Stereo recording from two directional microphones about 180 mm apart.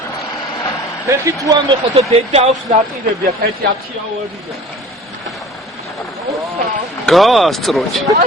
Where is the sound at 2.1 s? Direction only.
35° right (ahead or behind).